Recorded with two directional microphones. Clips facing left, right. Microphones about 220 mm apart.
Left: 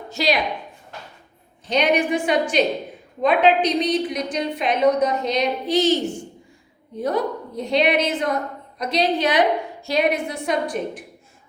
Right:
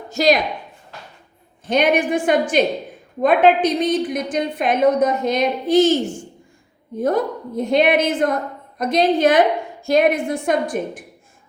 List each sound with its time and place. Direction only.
0.1 s a woman's voice: 45° right (ahead or behind)
1.6 s a woman's voice: 50° right (ahead or behind)